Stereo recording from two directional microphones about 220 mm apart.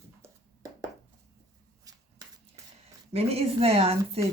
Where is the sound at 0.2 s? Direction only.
15° right (ahead or behind).